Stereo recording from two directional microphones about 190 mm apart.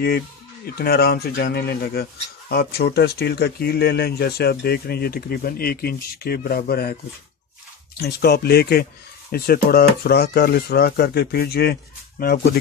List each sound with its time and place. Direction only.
0.7 s speech: 55° left (ahead or behind)
8.0 s speech: 55° left (ahead or behind)